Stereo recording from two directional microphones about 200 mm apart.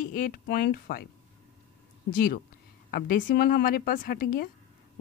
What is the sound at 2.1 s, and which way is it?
Speech, 45° left (ahead or behind).